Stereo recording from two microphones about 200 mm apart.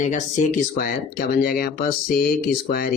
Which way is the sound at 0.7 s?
50° left (ahead or behind).